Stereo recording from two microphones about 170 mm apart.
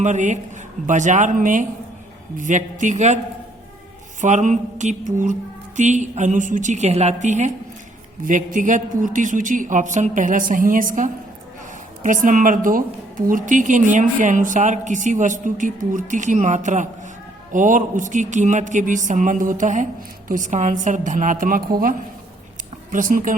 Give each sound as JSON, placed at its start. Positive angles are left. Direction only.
{"t": 0.0, "sound": "a woman's voice", "side_deg": -45}
{"t": 4.2, "sound": "a woman's voice", "side_deg": -45}